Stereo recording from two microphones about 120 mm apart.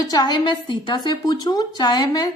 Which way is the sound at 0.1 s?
35° left (ahead or behind).